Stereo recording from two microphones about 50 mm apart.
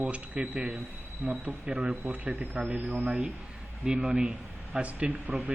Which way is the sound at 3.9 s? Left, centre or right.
Right.